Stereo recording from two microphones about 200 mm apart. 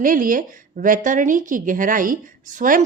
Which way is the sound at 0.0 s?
45° right (ahead or behind).